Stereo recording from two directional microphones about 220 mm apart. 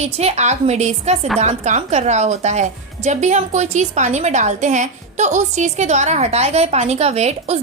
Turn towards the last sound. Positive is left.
turn(degrees=-30)  # may be behind; listen again after turning